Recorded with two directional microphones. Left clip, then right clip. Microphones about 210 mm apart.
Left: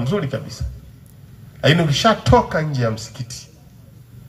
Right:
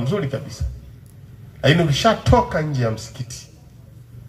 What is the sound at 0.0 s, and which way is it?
Speech, 40° left (ahead or behind).